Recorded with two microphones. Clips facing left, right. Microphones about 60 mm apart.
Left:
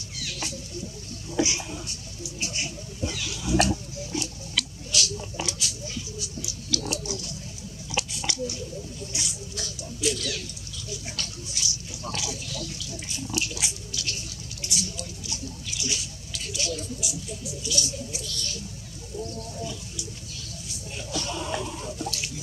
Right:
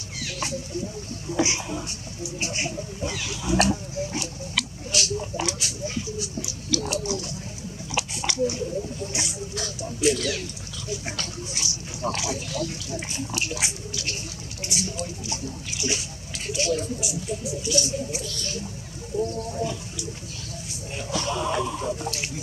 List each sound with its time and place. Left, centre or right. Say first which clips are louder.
0.2 s a sound: right 5 dB; right
2.4 s speech: right 4 dB; right
4.9 s a sound: right 3 dB; right
7.9 s speech: right 2 dB; right
21.1 s music: right 5 dB; right
21.8 s speech: right 4 dB; right